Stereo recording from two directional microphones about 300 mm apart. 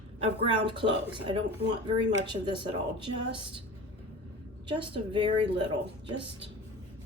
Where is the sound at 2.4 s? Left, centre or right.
Centre.